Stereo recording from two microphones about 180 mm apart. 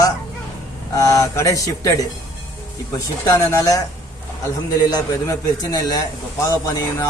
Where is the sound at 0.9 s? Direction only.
20° left (ahead or behind).